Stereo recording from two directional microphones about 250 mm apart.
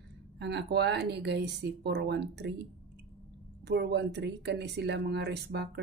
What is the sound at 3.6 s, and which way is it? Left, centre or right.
Speech, right.